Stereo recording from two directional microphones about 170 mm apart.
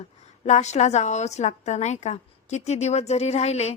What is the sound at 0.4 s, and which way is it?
A woman's voice, 40° left (ahead or behind).